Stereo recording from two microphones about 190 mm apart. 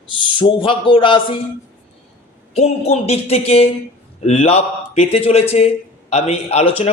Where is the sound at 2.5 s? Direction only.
30° left (ahead or behind).